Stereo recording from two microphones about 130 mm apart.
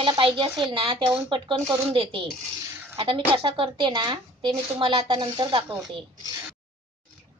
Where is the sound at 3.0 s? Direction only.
40° right (ahead or behind).